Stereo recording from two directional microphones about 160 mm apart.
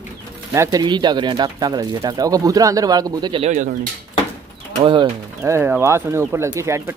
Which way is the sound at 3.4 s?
50° right (ahead or behind).